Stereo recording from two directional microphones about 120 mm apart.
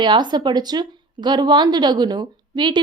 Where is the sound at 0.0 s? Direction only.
40° right (ahead or behind).